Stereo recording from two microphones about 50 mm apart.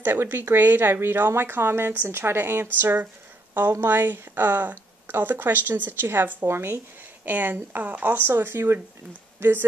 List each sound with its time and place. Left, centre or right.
0.0 s speech: right
7.2 s speech: right
9.4 s speech: right